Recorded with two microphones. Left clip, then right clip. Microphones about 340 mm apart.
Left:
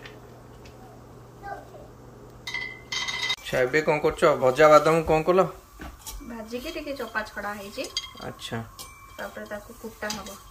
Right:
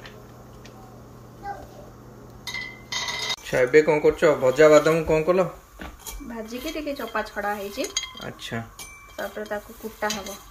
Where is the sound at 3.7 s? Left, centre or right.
Centre.